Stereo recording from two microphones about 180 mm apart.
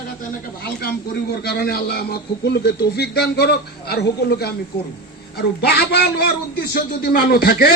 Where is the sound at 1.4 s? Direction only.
60° left (ahead or behind).